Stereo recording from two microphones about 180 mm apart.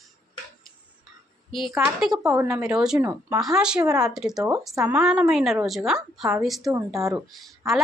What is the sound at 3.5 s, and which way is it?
Speech, 5° right (ahead or behind).